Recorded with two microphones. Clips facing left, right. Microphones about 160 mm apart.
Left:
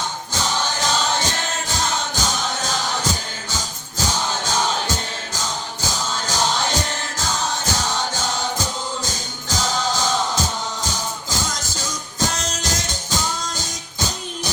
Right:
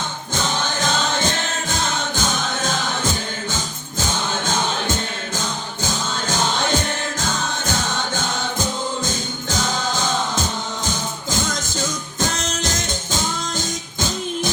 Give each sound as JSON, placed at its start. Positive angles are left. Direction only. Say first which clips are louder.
{"t": 0.3, "sound": "music", "louder": "right 1 dB", "side_deg": -55}